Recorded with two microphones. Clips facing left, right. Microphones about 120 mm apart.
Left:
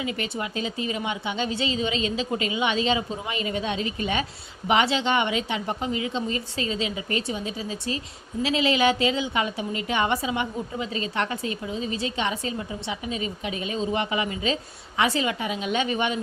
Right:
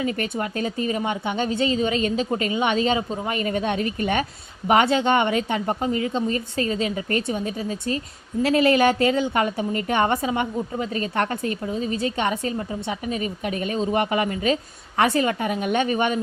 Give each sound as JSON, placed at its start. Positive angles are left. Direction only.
{"t": 0.0, "sound": "speech", "side_deg": -40}